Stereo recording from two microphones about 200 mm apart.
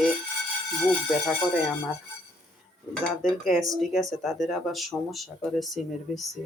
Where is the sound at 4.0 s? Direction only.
Centre (ahead or behind).